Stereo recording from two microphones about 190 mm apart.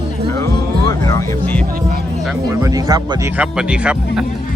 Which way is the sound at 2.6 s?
20° right (ahead or behind).